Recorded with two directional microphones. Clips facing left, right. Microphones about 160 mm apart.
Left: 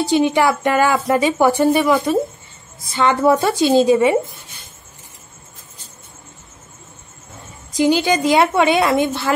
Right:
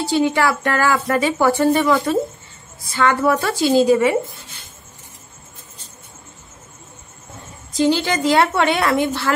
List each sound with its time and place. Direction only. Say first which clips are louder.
0.0 s a woman's voice: left 2 dB; 20° left (ahead or behind)
7.7 s a woman's voice: left 2 dB; 15° left (ahead or behind)